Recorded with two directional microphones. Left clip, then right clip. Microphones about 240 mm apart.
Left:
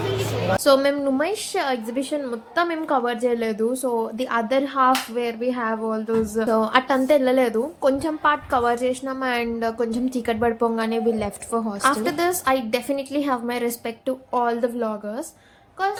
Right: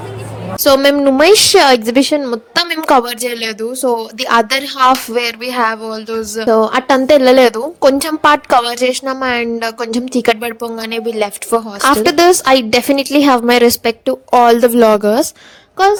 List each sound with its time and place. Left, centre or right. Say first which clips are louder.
0.5 s a woman's voice: right 8 dB; right